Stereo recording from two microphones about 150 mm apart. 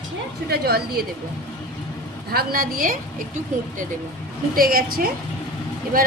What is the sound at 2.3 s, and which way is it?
Speech, 85° right.